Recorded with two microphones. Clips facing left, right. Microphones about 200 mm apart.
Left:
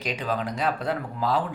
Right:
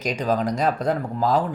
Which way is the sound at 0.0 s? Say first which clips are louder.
Right 6 dB; 45° right (ahead or behind).